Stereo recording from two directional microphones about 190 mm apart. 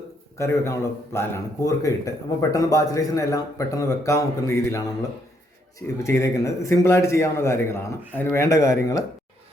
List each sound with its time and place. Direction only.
0.3 s speech: 15° left (ahead or behind)
6.0 s speech: 15° left (ahead or behind)